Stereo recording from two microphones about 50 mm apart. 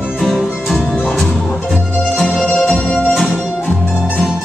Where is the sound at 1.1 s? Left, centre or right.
Centre.